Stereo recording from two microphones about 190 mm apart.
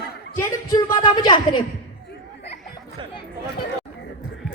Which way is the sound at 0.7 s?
20° left (ahead or behind).